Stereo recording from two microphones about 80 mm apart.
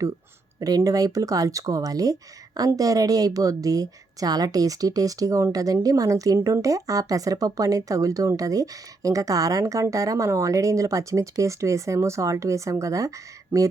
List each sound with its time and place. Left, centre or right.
0.9 s a woman's voice: right